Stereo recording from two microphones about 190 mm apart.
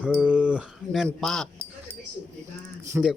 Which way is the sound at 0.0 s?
5° right (ahead or behind).